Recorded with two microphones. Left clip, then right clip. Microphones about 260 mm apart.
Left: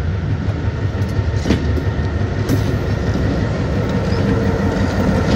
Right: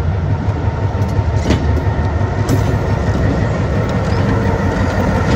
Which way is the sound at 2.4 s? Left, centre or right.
Centre.